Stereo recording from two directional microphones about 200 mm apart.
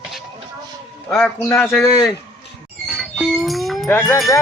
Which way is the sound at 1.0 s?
15° left (ahead or behind).